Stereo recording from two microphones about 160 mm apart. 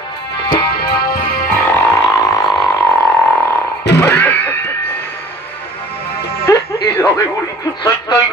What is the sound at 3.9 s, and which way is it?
Music, 10° left (ahead or behind).